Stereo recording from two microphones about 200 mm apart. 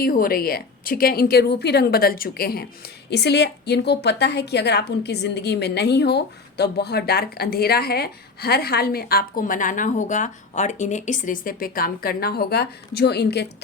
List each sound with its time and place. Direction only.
0.0 s a woman's voice: 45° left (ahead or behind)